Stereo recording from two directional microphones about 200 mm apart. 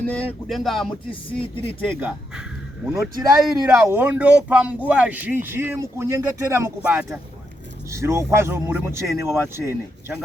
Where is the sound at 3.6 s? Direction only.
10° right (ahead or behind).